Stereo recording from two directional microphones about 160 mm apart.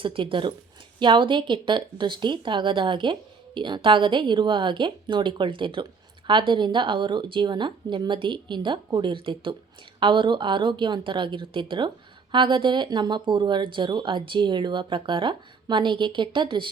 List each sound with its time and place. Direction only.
0.0 s speech: 30° right (ahead or behind)